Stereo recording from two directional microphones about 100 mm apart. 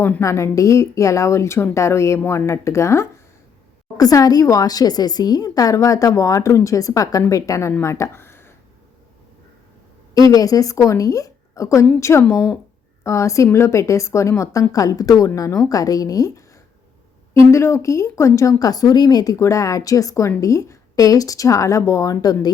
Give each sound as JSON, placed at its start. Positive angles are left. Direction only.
{"t": 0.2, "sound": "a woman's voice", "side_deg": 30}
{"t": 10.2, "sound": "a woman's voice", "side_deg": 40}
{"t": 17.5, "sound": "a woman's voice", "side_deg": 30}